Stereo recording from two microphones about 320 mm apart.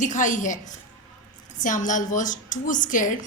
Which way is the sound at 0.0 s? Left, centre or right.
Left.